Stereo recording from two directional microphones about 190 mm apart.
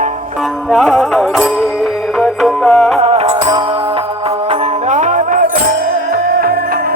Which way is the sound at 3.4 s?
25° right (ahead or behind).